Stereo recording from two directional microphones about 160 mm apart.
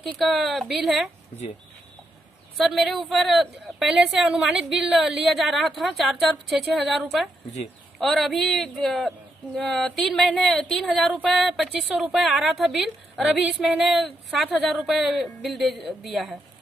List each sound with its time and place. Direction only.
0.1 s a woman's voice: centre (ahead or behind)
2.5 s a woman's voice: centre (ahead or behind)